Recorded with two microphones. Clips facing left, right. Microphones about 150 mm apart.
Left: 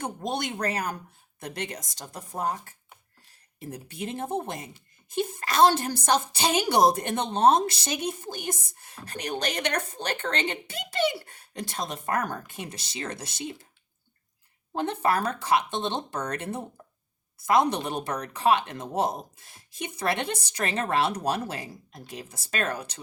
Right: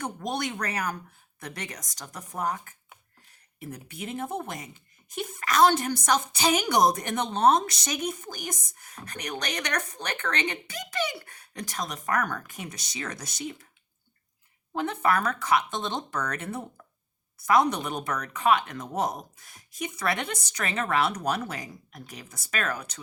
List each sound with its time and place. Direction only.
0.0 s speech: 25° left (ahead or behind)
14.7 s speech: 30° left (ahead or behind)